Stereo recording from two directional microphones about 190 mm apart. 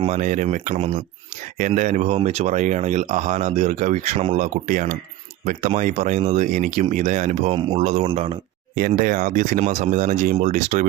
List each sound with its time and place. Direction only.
0.0 s speech: 40° right (ahead or behind)
8.9 s speech: 45° right (ahead or behind)